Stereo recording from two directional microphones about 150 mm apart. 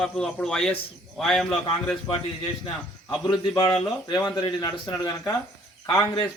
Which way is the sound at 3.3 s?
30° left (ahead or behind).